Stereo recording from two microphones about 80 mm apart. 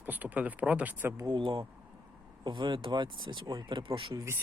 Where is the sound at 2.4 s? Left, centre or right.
Right.